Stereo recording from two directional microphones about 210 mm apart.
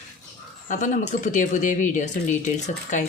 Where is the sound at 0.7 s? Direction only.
35° left (ahead or behind).